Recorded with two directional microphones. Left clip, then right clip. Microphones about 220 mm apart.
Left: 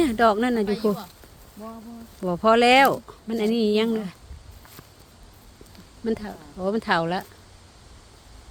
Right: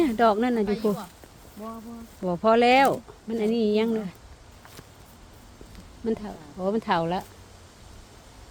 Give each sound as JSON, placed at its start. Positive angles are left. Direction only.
{"t": 0.0, "sound": "speech", "side_deg": 15}
{"t": 2.2, "sound": "speech", "side_deg": 15}
{"t": 6.1, "sound": "speech", "side_deg": 15}